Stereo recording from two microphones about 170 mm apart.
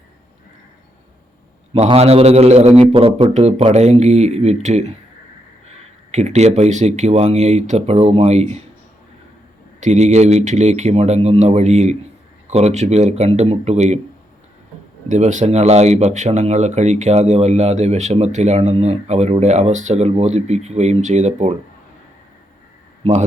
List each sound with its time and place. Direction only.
1.7 s speech: 35° right (ahead or behind)
6.1 s speech: 40° right (ahead or behind)
9.8 s speech: 45° right (ahead or behind)
15.1 s speech: 45° right (ahead or behind)
23.0 s speech: 35° right (ahead or behind)